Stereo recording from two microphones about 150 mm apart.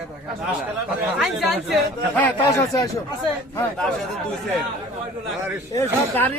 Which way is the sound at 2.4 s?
25° left (ahead or behind).